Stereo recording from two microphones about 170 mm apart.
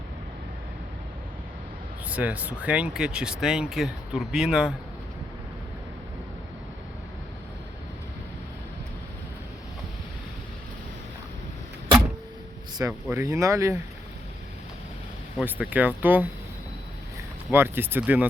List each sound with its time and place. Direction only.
2.0 s speech: 10° right (ahead or behind)
12.7 s speech: 20° right (ahead or behind)
15.4 s speech: 10° right (ahead or behind)
17.5 s speech: 10° right (ahead or behind)